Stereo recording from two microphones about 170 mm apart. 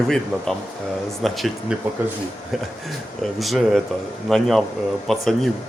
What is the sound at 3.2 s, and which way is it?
Speech, centre (ahead or behind).